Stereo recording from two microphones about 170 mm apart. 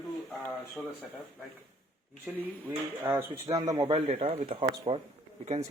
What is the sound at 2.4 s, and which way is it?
Speech, 10° right (ahead or behind).